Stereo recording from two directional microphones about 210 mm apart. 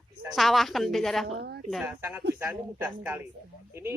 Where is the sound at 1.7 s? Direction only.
10° right (ahead or behind).